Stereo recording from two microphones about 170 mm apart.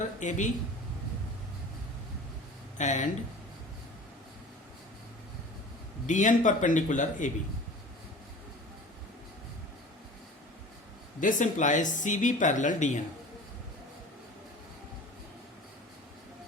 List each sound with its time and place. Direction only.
0.2 s speech: 45° left (ahead or behind)
2.7 s speech: 45° left (ahead or behind)
6.1 s speech: 50° left (ahead or behind)
11.2 s speech: 50° left (ahead or behind)